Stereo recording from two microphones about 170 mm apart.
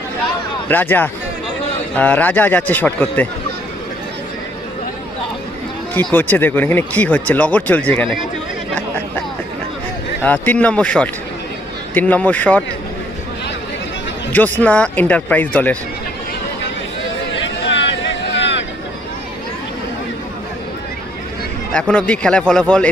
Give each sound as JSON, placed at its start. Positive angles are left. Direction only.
{"t": 0.7, "sound": "speech", "side_deg": 10}
{"t": 6.1, "sound": "speech", "side_deg": 10}
{"t": 10.2, "sound": "speech", "side_deg": 10}
{"t": 14.6, "sound": "speech", "side_deg": 10}
{"t": 17.3, "sound": "a sound", "side_deg": 90}
{"t": 21.7, "sound": "a man's voice", "side_deg": 5}